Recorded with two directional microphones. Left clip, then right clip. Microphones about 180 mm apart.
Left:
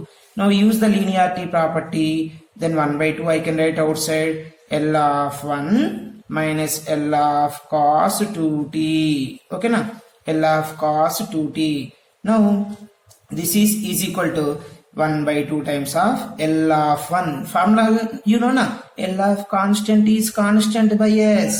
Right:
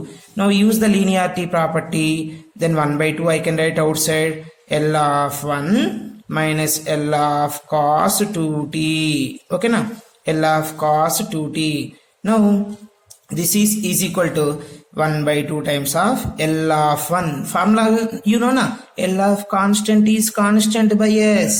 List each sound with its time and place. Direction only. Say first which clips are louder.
0.3 s speech: right 1 dB; 35° right (ahead or behind)
13.3 s speech: right 1 dB; 40° right (ahead or behind)